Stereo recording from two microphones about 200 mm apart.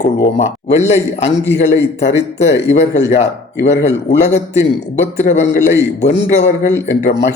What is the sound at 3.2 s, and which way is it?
Speech, 35° left (ahead or behind).